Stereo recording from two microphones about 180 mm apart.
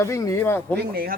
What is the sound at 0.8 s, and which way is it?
Speech, 60° right (ahead or behind).